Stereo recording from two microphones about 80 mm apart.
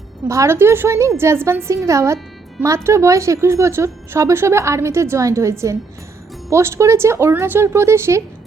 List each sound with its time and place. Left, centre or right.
0.3 s speech: right